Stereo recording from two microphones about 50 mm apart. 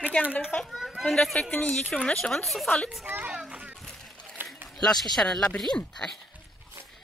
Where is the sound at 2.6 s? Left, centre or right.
Left.